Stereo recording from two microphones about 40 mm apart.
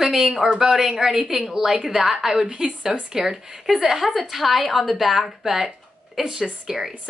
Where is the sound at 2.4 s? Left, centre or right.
Right.